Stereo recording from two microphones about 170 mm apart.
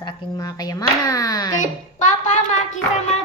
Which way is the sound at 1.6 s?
45° left (ahead or behind).